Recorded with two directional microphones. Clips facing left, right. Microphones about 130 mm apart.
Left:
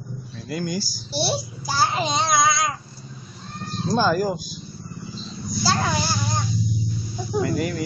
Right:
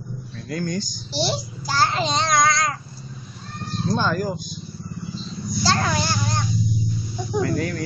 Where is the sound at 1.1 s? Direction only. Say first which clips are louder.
Even; 10° left (ahead or behind).